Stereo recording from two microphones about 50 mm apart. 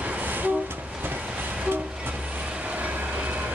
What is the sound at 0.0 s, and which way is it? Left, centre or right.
Train, right.